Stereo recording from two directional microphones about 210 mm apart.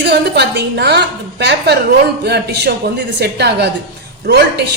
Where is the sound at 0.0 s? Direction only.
50° right (ahead or behind).